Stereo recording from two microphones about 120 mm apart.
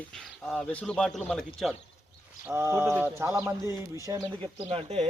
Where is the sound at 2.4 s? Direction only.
20° right (ahead or behind).